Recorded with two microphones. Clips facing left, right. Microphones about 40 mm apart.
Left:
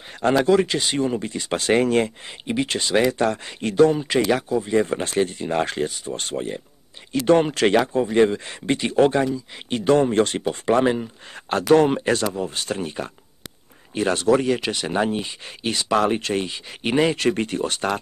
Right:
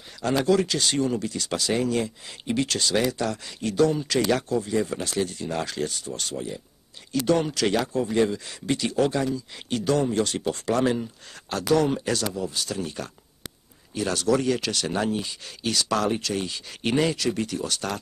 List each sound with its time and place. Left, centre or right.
0.5 s speech: left
2.4 s speech: left
4.3 s speech: centre
4.6 s speech: left
13.9 s speech: left
16.8 s speech: left
17.2 s speech: left